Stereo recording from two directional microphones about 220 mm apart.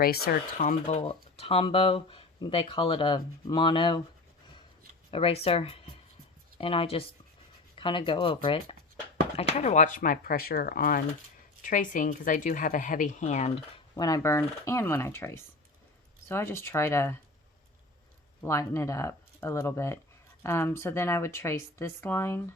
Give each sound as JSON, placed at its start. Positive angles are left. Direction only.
{"t": 0.0, "sound": "speech", "side_deg": 45}
{"t": 5.1, "sound": "speech", "side_deg": 25}
{"t": 13.9, "sound": "speech", "side_deg": 15}
{"t": 18.4, "sound": "speech", "side_deg": 15}